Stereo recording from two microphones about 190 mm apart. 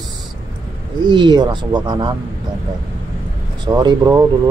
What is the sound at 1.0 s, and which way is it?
Speech, 25° right (ahead or behind).